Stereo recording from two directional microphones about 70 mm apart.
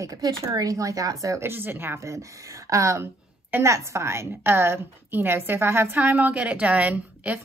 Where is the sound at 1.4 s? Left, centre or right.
Right.